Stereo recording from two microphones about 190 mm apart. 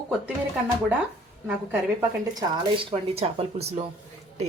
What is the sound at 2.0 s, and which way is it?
A woman's voice, 20° right (ahead or behind).